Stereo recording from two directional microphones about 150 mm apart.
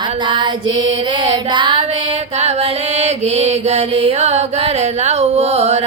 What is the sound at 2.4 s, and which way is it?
Mantra, 45° right (ahead or behind).